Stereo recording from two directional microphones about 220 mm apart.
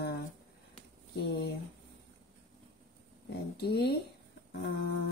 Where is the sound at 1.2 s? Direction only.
50° left (ahead or behind).